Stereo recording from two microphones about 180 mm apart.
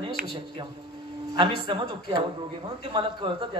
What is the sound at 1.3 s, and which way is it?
Speech, 25° right (ahead or behind).